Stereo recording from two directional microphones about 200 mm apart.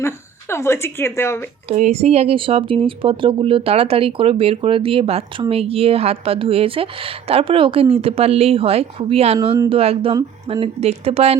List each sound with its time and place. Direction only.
0.0 s speech: 15° left (ahead or behind)
1.6 s a woman's voice: 35° right (ahead or behind)